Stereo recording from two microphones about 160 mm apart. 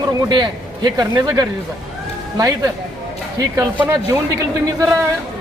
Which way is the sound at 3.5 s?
20° right (ahead or behind).